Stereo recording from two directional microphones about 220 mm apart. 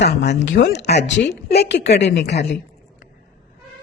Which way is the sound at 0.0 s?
50° left (ahead or behind).